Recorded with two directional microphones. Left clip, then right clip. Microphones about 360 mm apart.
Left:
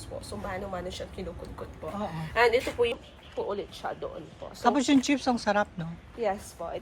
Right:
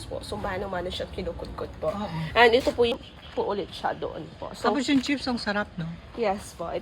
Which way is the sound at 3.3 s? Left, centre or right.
Right.